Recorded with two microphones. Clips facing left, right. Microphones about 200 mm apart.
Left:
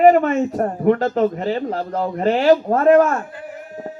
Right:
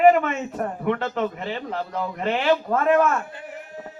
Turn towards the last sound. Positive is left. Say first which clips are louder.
# left 6 dB
turn(degrees=40)  # may be behind; listen again after turning